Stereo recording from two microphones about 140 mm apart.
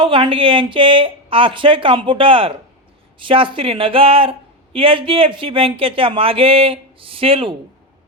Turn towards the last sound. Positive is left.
turn(degrees=-40)  # may be behind; listen again after turning